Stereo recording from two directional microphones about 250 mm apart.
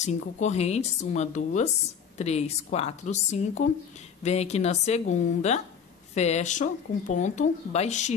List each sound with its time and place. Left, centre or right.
0.0 s speech: left